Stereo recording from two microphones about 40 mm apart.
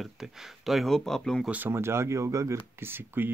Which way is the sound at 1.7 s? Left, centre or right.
Right.